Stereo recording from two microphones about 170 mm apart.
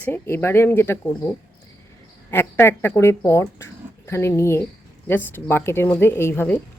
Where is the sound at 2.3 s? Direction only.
15° left (ahead or behind).